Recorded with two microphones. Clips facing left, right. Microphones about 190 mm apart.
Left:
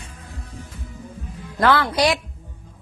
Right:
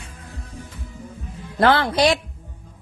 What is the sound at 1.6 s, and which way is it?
Speech, 30° right (ahead or behind).